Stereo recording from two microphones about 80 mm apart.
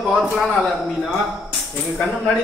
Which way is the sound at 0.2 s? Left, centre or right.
Centre.